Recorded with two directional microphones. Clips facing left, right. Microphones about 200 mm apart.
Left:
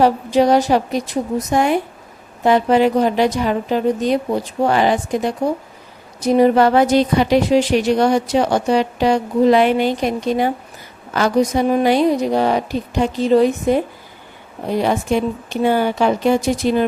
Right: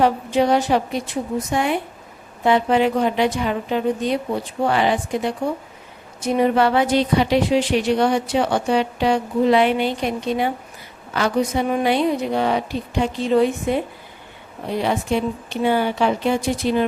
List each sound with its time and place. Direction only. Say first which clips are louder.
0.0 s a woman's voice: left 4 dB; 40° left (ahead or behind)